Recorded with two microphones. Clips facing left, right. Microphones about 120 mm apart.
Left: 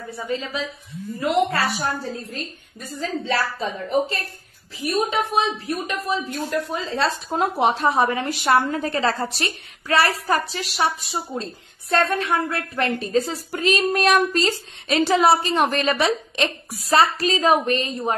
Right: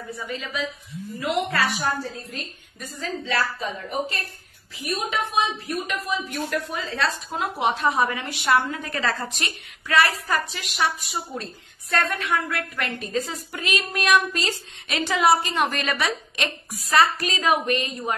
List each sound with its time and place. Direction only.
0.1 s a woman's voice: 30° left (ahead or behind)
3.0 s speech: 30° left (ahead or behind)
5.1 s a woman's voice: 30° left (ahead or behind)